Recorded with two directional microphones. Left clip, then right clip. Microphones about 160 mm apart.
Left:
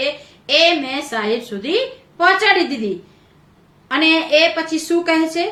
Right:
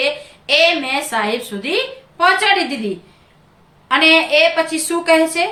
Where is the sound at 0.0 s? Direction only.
20° right (ahead or behind).